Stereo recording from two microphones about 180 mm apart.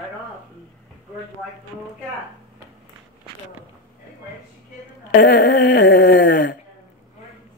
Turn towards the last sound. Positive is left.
turn(degrees=50)  # may be behind; listen again after turning